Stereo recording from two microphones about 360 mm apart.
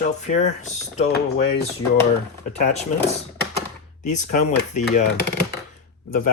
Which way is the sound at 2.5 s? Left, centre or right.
Centre.